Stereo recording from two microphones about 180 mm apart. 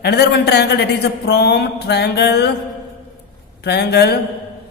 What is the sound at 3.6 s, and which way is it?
Speech, 65° left (ahead or behind).